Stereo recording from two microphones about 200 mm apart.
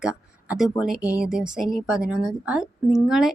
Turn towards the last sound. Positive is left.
turn(degrees=0)  # may be behind; listen again after turning